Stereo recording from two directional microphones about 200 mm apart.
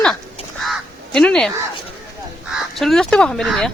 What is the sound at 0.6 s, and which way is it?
Goose, centre (ahead or behind).